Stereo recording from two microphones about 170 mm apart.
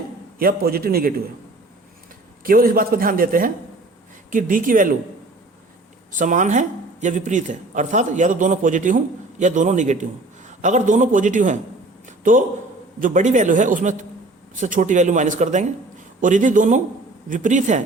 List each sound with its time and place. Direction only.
0.3 s a man's voice: 60° right (ahead or behind)
2.4 s a man's voice: 60° right (ahead or behind)
6.1 s speech: 50° right (ahead or behind)
12.0 s a sound: 50° right (ahead or behind)
13.0 s speech: 50° right (ahead or behind)